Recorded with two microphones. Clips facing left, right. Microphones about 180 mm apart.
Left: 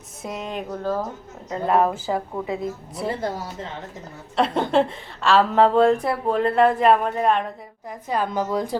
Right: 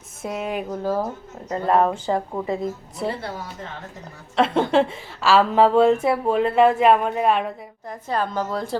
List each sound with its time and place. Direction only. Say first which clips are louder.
0.2 s speech: right 3 dB; 5° right (ahead or behind)
1.5 s a woman's voice: right 1 dB; centre (ahead or behind)
4.4 s a woman's voice: right 1 dB; centre (ahead or behind)
7.9 s a woman's voice: even; 10° left (ahead or behind)